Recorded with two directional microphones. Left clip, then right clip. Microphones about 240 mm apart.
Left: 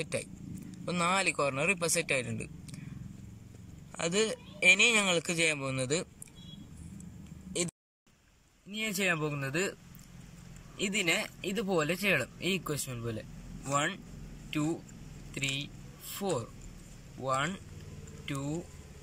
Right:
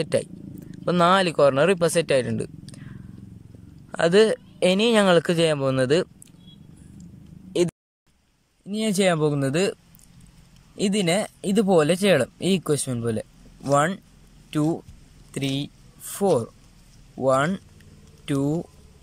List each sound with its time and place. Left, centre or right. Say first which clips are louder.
0.8 s speech: right 11 dB; right
3.9 s speech: right 13 dB; right
8.6 s speech: right 9 dB; right
10.8 s speech: right 7 dB; right